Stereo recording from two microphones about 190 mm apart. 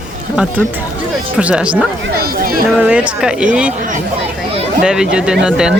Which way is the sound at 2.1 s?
50° right (ahead or behind).